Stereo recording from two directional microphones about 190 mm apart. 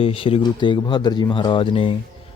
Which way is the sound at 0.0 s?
30° left (ahead or behind).